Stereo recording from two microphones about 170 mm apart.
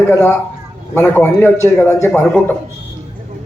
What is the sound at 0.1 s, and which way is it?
A man's voice, 15° left (ahead or behind).